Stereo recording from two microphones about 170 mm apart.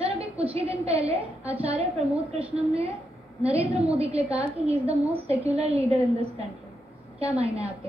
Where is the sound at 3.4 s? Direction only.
35° right (ahead or behind).